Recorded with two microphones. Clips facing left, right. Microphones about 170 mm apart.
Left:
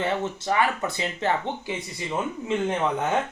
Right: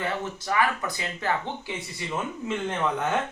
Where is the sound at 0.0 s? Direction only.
25° left (ahead or behind).